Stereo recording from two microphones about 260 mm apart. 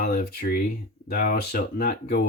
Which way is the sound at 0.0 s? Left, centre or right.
Left.